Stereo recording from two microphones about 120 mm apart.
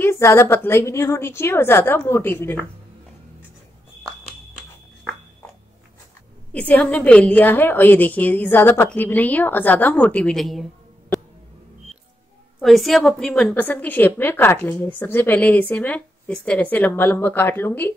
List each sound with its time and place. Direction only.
0.0 s a woman's voice: 20° left (ahead or behind)
6.5 s a woman's voice: 10° left (ahead or behind)
12.5 s a woman's voice: centre (ahead or behind); by 17.9 s 20° left (ahead or behind)